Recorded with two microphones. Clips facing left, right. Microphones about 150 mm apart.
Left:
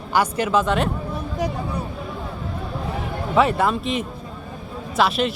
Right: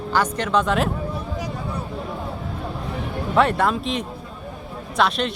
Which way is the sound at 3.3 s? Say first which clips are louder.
Even; centre (ahead or behind).